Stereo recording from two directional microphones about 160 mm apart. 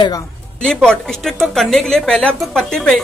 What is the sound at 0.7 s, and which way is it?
A woman's voice, 5° left (ahead or behind).